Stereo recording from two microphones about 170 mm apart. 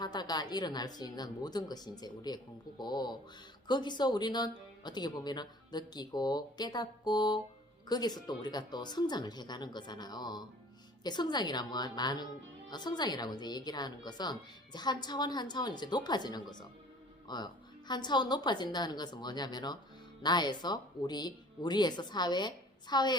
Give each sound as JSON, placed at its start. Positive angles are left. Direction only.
{"t": 0.0, "sound": "a woman's voice", "side_deg": 25}